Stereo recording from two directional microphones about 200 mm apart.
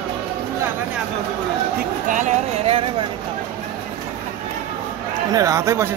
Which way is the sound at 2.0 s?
40° right (ahead or behind).